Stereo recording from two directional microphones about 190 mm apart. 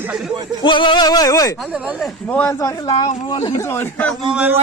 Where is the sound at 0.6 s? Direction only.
25° left (ahead or behind).